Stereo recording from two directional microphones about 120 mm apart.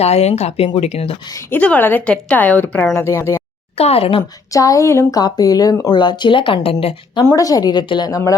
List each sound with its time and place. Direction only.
0.0 s speech: 60° left (ahead or behind)
1.5 s a woman's voice: 10° left (ahead or behind)
3.8 s speech: 55° left (ahead or behind)
4.2 s a woman's voice: 30° left (ahead or behind)
5.9 s speech: 40° left (ahead or behind)
7.3 s a woman's voice: 30° left (ahead or behind)